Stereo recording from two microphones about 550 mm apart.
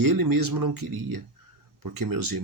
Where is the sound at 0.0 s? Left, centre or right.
Right.